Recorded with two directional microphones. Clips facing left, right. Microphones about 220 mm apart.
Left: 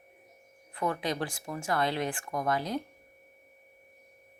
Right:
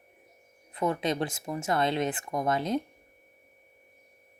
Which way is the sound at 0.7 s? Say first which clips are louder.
Right 3 dB; 20° right (ahead or behind).